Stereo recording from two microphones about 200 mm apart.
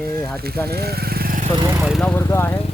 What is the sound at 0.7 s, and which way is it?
Lawn mower, 50° right (ahead or behind).